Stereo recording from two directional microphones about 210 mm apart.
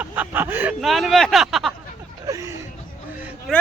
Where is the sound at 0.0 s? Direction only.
10° right (ahead or behind).